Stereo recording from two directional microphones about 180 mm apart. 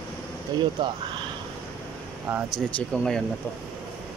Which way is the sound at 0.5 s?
25° right (ahead or behind).